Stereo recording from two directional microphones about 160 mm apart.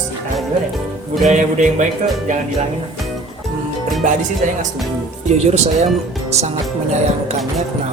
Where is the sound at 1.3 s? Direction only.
50° right (ahead or behind).